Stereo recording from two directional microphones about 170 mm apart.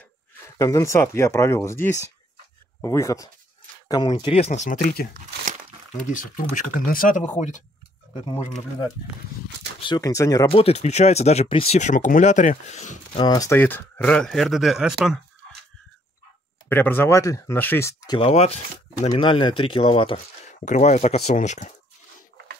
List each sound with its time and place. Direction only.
0.6 s speech: 20° left (ahead or behind); by 5.0 s 55° left (ahead or behind)
6.0 s speech: 50° left (ahead or behind)
9.8 s speech: 25° left (ahead or behind)
10.5 s speech: 35° left (ahead or behind)
13.2 s speech: 20° left (ahead or behind); by 15.1 s centre (ahead or behind)
16.6 s speech: 10° left (ahead or behind)
18.3 s speech: 40° left (ahead or behind)
20.6 s speech: 45° left (ahead or behind)